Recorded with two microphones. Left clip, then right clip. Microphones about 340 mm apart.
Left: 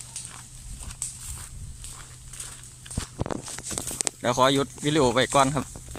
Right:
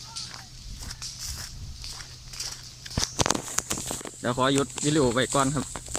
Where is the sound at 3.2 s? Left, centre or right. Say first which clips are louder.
Right 6 dB; right.